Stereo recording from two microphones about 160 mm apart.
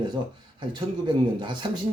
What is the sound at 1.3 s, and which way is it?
Speech, 30° right (ahead or behind).